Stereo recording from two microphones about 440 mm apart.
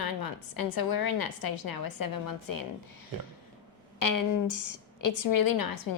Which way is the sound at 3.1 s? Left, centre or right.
Right.